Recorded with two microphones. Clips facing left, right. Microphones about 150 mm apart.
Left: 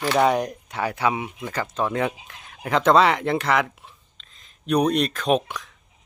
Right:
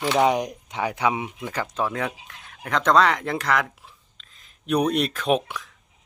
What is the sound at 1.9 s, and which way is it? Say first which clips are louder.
Speech: left 4 dB; centre (ahead or behind).